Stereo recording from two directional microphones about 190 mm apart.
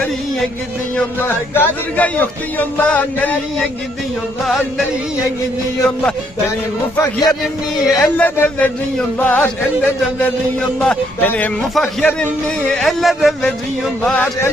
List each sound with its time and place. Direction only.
0.9 s speech: 10° left (ahead or behind)
5.8 s a man's voice: 5° left (ahead or behind)
6.9 s speech: 15° left (ahead or behind)
10.8 s a man's voice: 5° left (ahead or behind)